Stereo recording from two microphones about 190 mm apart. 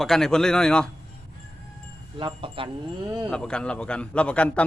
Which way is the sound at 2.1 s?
25° right (ahead or behind).